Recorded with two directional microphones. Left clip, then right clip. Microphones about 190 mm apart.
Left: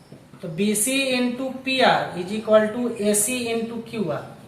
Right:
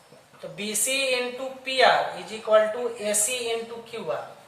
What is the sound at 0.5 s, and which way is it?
Speech, 15° right (ahead or behind).